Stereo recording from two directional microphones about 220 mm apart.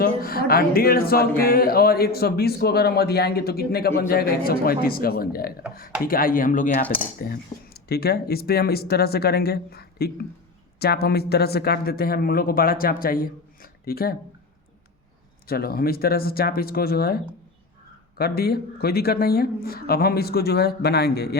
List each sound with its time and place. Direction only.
0.0 s speech: 45° left (ahead or behind)
6.8 s cutlery: 10° left (ahead or behind)
7.2 s speech: 45° left (ahead or behind)
15.4 s speech: 45° left (ahead or behind)
18.2 s speech: 45° left (ahead or behind)